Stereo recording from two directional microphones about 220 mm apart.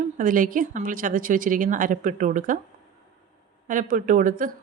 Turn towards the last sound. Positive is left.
turn(degrees=-40)  # may be behind; listen again after turning